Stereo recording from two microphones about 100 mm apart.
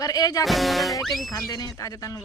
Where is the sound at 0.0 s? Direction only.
40° left (ahead or behind).